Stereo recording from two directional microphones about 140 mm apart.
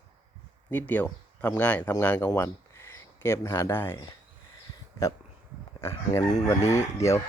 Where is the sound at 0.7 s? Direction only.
10° left (ahead or behind).